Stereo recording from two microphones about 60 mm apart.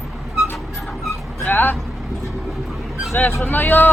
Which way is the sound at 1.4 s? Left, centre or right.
Left.